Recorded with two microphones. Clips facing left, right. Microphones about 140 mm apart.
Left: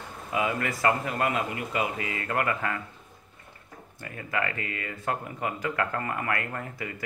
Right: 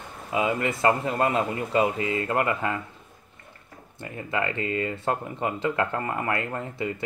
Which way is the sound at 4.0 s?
25° right (ahead or behind).